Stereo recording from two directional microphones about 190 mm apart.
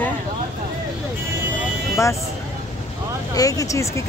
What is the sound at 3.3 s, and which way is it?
Speech, 20° left (ahead or behind).